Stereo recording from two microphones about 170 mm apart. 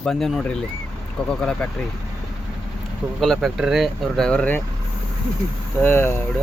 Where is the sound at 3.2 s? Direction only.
Centre (ahead or behind).